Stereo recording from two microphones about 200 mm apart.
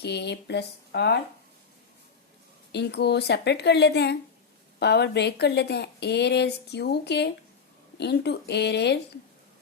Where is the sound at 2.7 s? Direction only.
55° left (ahead or behind).